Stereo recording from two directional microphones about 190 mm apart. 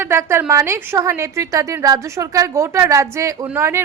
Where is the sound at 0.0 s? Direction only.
15° right (ahead or behind).